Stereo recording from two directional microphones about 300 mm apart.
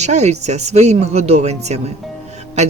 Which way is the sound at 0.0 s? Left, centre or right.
Right.